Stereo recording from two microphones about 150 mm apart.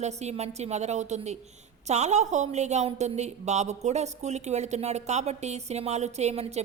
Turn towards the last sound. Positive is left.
turn(degrees=-45)  # may be behind; listen again after turning